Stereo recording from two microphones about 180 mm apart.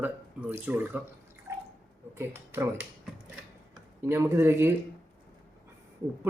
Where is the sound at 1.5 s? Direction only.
15° right (ahead or behind).